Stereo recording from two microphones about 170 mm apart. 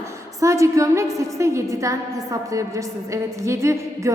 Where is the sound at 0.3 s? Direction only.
20° right (ahead or behind).